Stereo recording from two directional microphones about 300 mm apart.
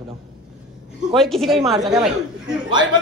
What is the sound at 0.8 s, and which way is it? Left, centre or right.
Speech, centre.